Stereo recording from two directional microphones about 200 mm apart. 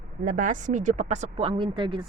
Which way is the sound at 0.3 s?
40° right (ahead or behind).